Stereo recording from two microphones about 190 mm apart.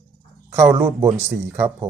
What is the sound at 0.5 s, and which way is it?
Speech, 15° right (ahead or behind).